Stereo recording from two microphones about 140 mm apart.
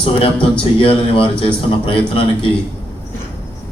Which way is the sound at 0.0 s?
40° left (ahead or behind).